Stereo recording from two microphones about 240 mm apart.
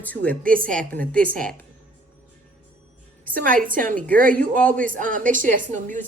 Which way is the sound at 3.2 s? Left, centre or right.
Right.